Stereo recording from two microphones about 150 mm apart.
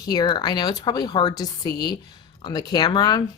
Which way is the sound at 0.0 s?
25° left (ahead or behind).